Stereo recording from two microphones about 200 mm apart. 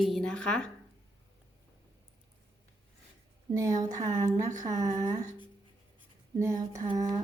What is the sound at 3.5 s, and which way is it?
A woman's voice, 20° right (ahead or behind).